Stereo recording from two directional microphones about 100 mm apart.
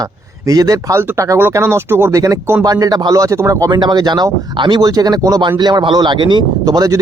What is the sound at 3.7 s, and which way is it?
Speech, 50° right (ahead or behind).